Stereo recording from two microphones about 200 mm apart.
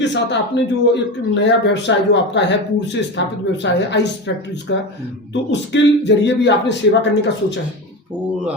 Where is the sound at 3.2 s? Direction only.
60° left (ahead or behind).